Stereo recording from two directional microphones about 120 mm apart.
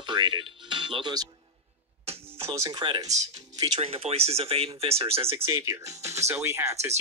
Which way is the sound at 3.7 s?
55° right (ahead or behind).